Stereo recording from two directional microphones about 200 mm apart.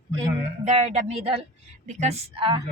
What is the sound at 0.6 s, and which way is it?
Speech, 30° right (ahead or behind).